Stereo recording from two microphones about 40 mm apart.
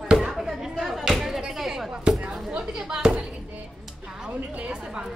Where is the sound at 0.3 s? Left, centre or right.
Centre.